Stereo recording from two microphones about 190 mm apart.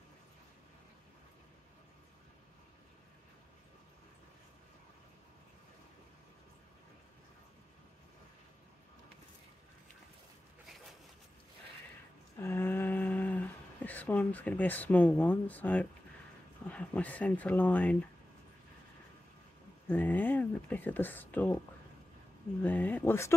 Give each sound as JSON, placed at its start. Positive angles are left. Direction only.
{"t": 12.4, "sound": "a sound", "side_deg": 10}
{"t": 16.6, "sound": "speech", "side_deg": 5}
{"t": 19.9, "sound": "speech", "side_deg": 10}
{"t": 22.6, "sound": "speech", "side_deg": 10}